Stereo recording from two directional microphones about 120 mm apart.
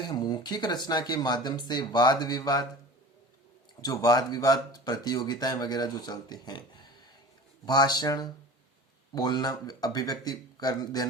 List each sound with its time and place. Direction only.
0.0 s speech: 35° left (ahead or behind)
3.8 s speech: 30° left (ahead or behind)